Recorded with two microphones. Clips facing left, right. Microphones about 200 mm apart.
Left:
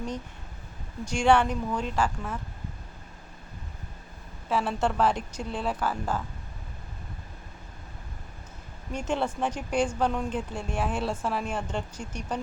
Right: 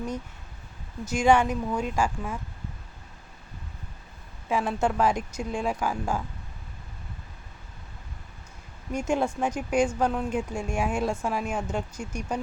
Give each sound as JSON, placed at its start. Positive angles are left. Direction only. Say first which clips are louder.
{"t": 1.0, "sound": "speech", "louder": "right 1 dB", "side_deg": -5}
{"t": 4.4, "sound": "speech", "louder": "right 1 dB", "side_deg": -10}
{"t": 8.9, "sound": "speech", "louder": "right 3 dB", "side_deg": -10}